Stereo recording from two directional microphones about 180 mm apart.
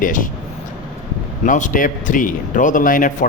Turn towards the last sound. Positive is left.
turn(degrees=50)  # may be behind; listen again after turning